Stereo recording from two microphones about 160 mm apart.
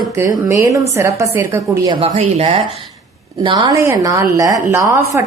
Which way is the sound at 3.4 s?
25° right (ahead or behind).